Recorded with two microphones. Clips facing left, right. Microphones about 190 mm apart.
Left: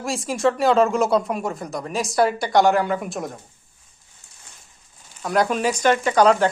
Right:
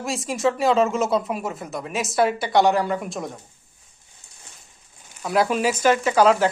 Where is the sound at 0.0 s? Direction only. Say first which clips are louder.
Left 2 dB; centre (ahead or behind).